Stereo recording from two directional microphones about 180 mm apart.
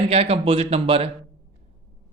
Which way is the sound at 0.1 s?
35° right (ahead or behind).